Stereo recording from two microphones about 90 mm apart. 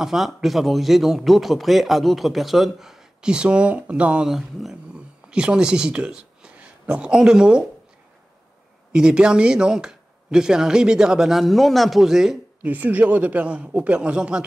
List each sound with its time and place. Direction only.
0.0 s speech: 5° right (ahead or behind)
8.9 s speech: 10° right (ahead or behind)
12.6 s speech: 20° right (ahead or behind)